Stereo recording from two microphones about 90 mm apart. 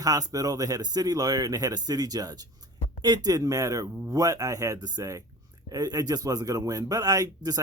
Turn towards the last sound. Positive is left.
turn(degrees=-45)  # may be behind; listen again after turning